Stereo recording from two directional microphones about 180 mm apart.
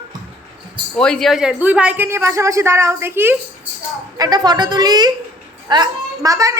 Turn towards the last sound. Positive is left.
turn(degrees=-20)  # may be behind; listen again after turning